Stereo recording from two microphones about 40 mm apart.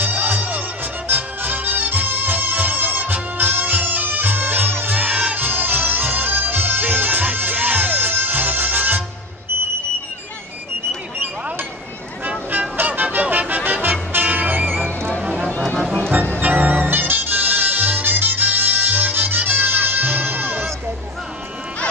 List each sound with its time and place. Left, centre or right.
0.0 s music: right
4.9 s crowd: right
5.3 s music: right
12.5 s music: right
15.2 s music: right
16.4 s music: right
16.7 s music: right